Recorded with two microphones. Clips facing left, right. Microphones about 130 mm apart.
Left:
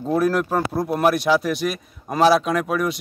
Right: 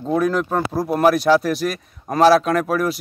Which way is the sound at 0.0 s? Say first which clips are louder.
Even; 5° left (ahead or behind).